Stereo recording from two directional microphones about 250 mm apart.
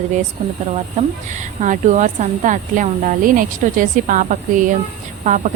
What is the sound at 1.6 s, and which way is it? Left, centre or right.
Speech, right.